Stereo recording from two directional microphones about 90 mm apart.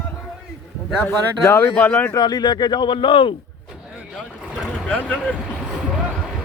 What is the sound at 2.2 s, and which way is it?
Speech, 55° left (ahead or behind).